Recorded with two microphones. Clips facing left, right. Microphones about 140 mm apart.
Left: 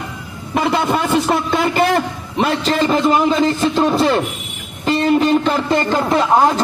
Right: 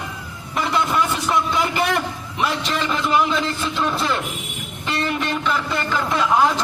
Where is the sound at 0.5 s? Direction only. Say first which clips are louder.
Left 4 dB; 70° left (ahead or behind).